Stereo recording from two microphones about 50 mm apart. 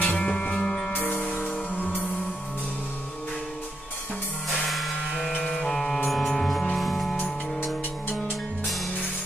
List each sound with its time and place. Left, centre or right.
0.0 s music: left
0.9 s music: left
4.6 s music: centre
5.1 s music: centre
5.6 s music: centre